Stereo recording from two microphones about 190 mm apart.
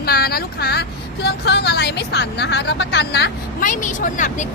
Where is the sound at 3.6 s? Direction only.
45° left (ahead or behind).